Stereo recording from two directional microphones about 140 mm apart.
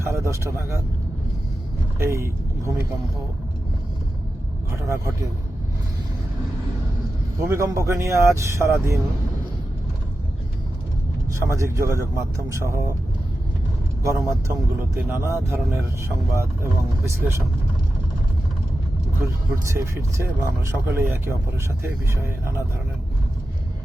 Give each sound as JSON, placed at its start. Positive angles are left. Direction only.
{"t": 0.1, "sound": "speech", "side_deg": -20}
{"t": 2.0, "sound": "speech", "side_deg": -20}
{"t": 4.7, "sound": "speech", "side_deg": -20}
{"t": 7.3, "sound": "speech", "side_deg": -20}
{"t": 11.4, "sound": "speech", "side_deg": -20}
{"t": 14.0, "sound": "speech", "side_deg": -20}
{"t": 19.2, "sound": "speech", "side_deg": -20}